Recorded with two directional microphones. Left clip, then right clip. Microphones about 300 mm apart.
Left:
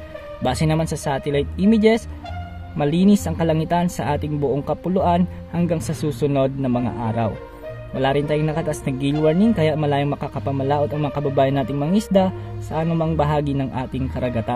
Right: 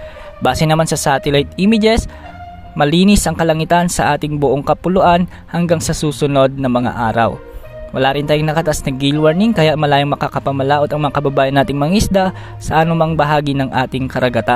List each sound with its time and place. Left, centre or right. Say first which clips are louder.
0.4 s speech: right 8 dB; right